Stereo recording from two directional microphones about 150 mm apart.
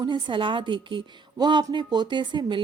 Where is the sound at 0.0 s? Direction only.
30° right (ahead or behind).